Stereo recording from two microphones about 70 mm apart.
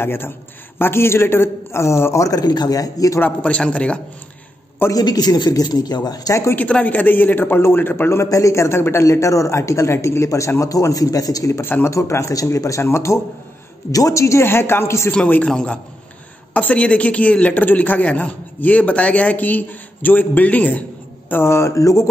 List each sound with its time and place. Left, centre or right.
0.0 s a man's voice: left
2.2 s speech: left
3.2 s speech: left
4.9 s speech: left
6.5 s a man's voice: left
8.2 s a man's voice: left
9.0 s a man's voice: left
11.6 s a man's voice: left
11.9 s a man's voice: left
13.9 s a man's voice: left
15.0 s a man's voice: left
21.3 s a man's voice: left